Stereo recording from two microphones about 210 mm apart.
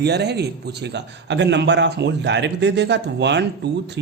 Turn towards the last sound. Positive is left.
turn(degrees=-55)  # may be behind; listen again after turning